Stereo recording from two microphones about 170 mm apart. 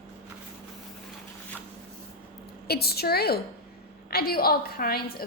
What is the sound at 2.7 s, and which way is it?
A woman's voice, 65° left (ahead or behind).